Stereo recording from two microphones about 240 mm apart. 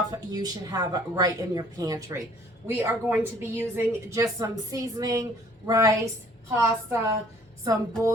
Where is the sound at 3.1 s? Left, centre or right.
Centre.